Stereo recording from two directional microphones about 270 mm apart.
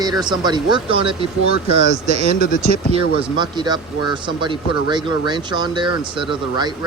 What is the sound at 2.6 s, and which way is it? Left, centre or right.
Speech, right.